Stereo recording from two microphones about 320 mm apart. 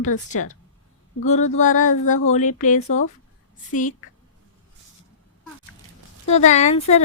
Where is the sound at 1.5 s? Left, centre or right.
Left.